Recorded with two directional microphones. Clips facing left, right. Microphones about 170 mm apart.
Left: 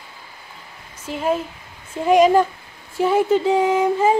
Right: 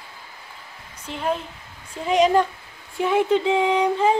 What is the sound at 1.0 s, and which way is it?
Speech, 5° left (ahead or behind).